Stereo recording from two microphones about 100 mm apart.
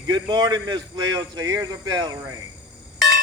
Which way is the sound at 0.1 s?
40° right (ahead or behind).